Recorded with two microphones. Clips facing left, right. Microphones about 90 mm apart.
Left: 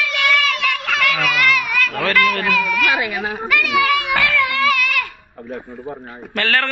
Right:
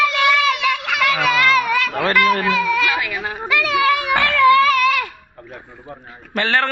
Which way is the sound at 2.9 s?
20° left (ahead or behind).